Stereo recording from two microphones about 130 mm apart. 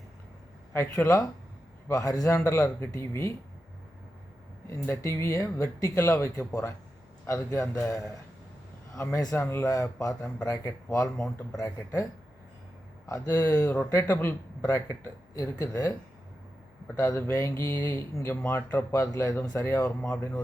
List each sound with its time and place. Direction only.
0.7 s speech: 20° left (ahead or behind)
4.9 s speech: 20° left (ahead or behind)
9.1 s speech: 25° left (ahead or behind)
13.1 s speech: 25° left (ahead or behind)
17.0 s speech: 20° left (ahead or behind)